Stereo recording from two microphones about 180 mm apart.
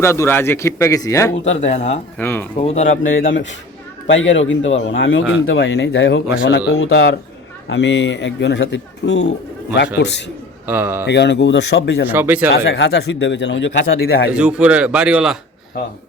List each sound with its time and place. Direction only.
0.0 s a man's voice: 15° left (ahead or behind)
1.5 s speech: 40° left (ahead or behind)
2.1 s a man's voice: 10° left (ahead or behind)
2.6 s speech: 35° left (ahead or behind)
3.1 s a man's voice: 90° left; by 10.2 s 75° left (ahead or behind)
10.7 s speech: 10° right (ahead or behind)
11.0 s speech: 70° left (ahead or behind)
12.0 s speech: 10° right (ahead or behind)
12.6 s speech: 75° left (ahead or behind)
14.3 s speech: 5° right (ahead or behind)